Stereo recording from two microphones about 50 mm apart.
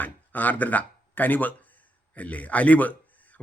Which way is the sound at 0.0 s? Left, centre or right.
Left.